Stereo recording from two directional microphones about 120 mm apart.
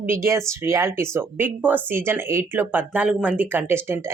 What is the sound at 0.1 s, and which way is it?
Speech, 20° right (ahead or behind).